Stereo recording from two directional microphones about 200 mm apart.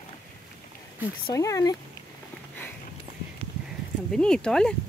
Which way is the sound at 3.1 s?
30° right (ahead or behind).